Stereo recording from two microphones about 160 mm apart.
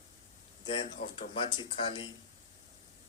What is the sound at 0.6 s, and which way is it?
Speech, 30° left (ahead or behind).